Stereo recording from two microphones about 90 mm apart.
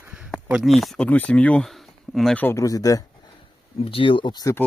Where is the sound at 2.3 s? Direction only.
20° left (ahead or behind).